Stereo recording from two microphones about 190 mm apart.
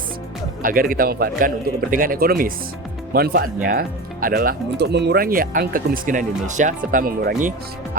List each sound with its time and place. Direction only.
0.6 s speech: 50° right (ahead or behind)